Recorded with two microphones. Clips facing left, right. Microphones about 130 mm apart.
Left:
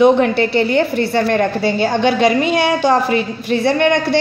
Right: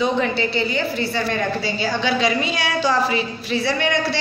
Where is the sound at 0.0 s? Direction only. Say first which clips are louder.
Left 9 dB; 60° left (ahead or behind).